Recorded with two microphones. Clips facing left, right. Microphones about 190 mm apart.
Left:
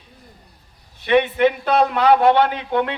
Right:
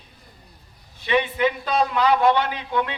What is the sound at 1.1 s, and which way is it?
A man's voice, 60° left (ahead or behind).